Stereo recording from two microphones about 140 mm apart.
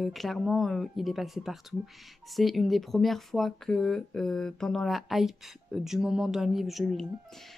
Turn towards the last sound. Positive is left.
turn(degrees=0)  # may be behind; listen again after turning